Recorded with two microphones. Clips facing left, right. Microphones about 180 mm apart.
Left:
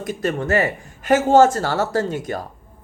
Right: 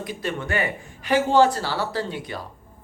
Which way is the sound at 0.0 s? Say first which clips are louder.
Left 6 dB; 45° left (ahead or behind).